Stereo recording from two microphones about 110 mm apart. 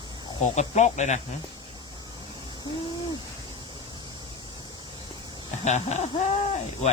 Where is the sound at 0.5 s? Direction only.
90° left.